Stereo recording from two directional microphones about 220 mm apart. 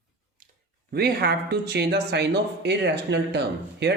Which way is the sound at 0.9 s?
45° right (ahead or behind).